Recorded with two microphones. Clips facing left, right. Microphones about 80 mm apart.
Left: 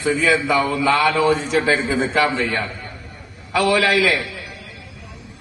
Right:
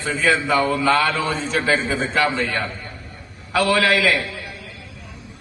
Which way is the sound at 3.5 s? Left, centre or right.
Left.